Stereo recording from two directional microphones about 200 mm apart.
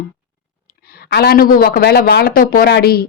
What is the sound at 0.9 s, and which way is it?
Speech, 50° left (ahead or behind).